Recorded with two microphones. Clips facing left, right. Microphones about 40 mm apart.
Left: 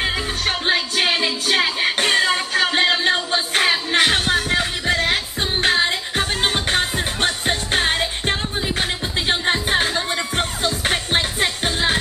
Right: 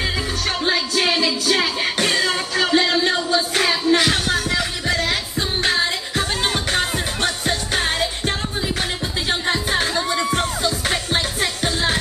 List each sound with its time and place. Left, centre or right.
0.0 s music: left